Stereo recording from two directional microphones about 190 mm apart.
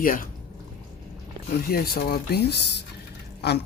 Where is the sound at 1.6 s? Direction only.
55° left (ahead or behind).